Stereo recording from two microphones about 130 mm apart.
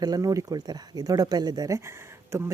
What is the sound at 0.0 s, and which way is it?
Speech, 30° right (ahead or behind).